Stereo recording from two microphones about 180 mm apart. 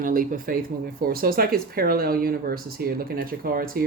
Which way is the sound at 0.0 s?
50° right (ahead or behind).